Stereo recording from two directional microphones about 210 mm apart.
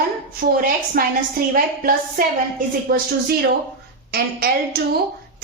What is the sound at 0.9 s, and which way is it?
A woman's voice, 45° right (ahead or behind).